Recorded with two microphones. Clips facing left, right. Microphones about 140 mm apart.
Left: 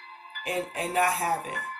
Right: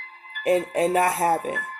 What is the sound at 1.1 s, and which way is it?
Speech, 50° right (ahead or behind).